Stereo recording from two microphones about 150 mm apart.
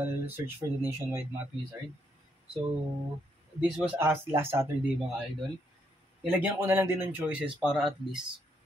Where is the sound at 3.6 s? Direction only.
15° right (ahead or behind).